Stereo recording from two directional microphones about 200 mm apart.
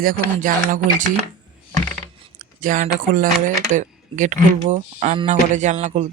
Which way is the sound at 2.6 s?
40° right (ahead or behind).